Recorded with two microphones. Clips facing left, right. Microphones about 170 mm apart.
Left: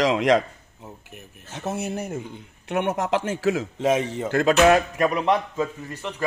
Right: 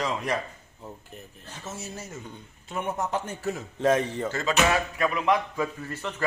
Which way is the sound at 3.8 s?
15° left (ahead or behind).